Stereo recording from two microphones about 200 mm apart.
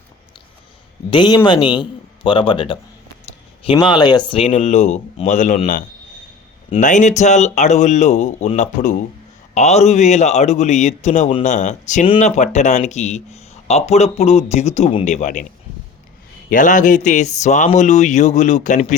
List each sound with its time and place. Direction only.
1.1 s a man's voice: 20° left (ahead or behind); by 15.4 s 40° left (ahead or behind)
16.5 s speech: 40° left (ahead or behind)